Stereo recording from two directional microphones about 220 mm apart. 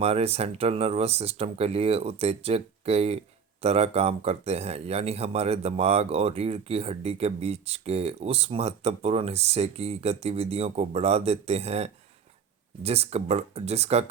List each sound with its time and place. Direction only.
0.0 s speech: 30° right (ahead or behind)